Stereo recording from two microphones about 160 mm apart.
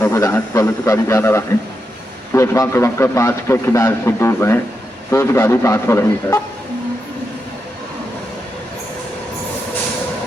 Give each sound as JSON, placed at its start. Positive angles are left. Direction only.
{"t": 0.0, "sound": "a man's voice", "side_deg": 15}